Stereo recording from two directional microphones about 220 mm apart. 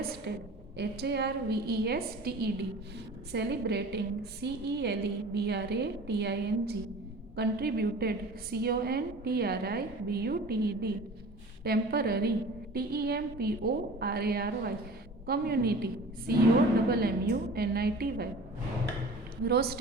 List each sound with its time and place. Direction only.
0.3 s a woman's voice: 50° right (ahead or behind)
19.5 s a woman's voice: 45° right (ahead or behind)